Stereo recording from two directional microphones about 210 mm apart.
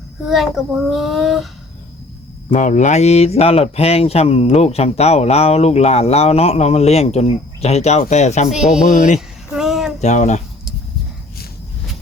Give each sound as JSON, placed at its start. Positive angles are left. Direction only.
{"t": 0.3, "sound": "a child's voice", "side_deg": 0}
{"t": 2.5, "sound": "speech", "side_deg": 35}
{"t": 8.4, "sound": "a child's voice", "side_deg": 0}
{"t": 8.9, "sound": "speech", "side_deg": 35}
{"t": 9.6, "sound": "a sound", "side_deg": 0}
{"t": 10.0, "sound": "speech", "side_deg": 35}